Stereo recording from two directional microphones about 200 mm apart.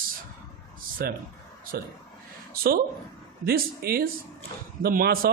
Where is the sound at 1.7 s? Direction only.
50° right (ahead or behind).